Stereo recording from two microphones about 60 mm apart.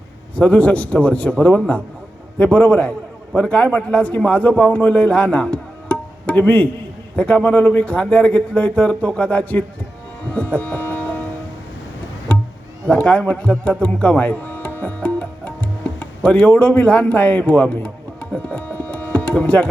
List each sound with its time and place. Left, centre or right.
0.3 s a man's voice: left
10.3 s music: left
12.3 s music: left
12.9 s speech: left
17.8 s tabla: left